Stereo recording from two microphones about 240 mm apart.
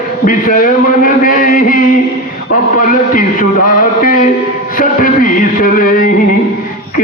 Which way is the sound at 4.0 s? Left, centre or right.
Left.